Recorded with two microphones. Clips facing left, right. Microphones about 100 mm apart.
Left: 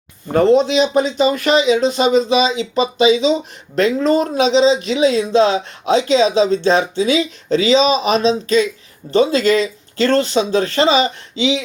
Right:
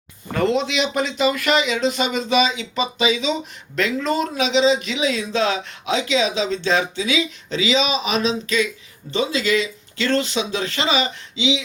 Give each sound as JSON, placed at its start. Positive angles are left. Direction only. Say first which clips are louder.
{"t": 0.3, "sound": "speech", "louder": "left 8 dB", "side_deg": 35}